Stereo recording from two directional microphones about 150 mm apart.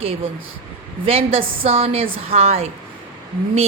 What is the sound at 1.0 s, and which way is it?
A woman's voice, 40° right (ahead or behind).